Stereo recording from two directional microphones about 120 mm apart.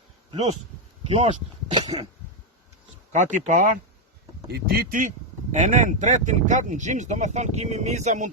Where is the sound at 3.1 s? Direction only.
90° right.